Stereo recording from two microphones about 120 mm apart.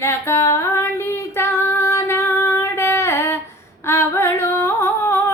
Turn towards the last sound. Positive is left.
turn(degrees=20)  # may be behind; listen again after turning